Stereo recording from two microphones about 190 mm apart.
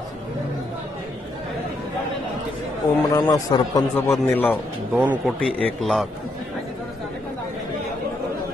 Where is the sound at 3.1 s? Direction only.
20° left (ahead or behind).